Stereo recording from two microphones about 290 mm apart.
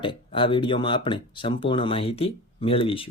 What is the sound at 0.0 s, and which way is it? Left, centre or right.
Speech, centre.